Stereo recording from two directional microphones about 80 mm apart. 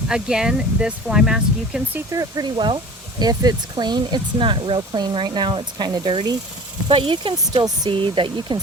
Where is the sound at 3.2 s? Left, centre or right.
Right.